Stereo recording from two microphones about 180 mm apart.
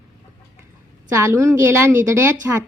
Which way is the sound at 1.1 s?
15° right (ahead or behind).